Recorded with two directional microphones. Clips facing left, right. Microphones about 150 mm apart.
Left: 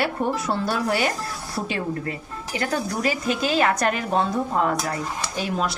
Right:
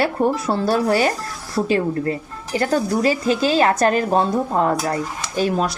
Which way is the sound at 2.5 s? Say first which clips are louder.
Right 7 dB; 35° right (ahead or behind).